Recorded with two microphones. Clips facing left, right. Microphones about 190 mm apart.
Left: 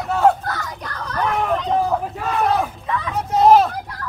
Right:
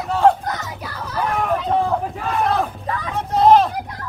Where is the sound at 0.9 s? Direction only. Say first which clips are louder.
Left 1 dB; 5° right (ahead or behind).